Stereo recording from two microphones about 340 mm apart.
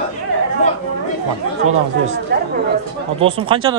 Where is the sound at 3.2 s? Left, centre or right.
Centre.